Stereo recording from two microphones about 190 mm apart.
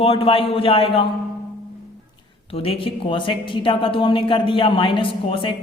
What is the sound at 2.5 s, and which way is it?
A man's voice, 30° left (ahead or behind).